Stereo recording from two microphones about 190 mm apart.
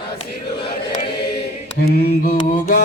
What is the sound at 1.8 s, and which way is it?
Mantra, 55° left (ahead or behind).